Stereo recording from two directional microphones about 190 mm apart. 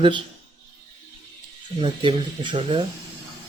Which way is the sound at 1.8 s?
25° right (ahead or behind).